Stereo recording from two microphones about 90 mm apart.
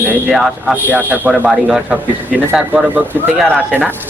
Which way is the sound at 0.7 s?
20° right (ahead or behind).